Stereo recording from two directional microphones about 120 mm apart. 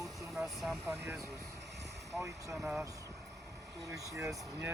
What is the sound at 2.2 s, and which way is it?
Speech, 25° right (ahead or behind).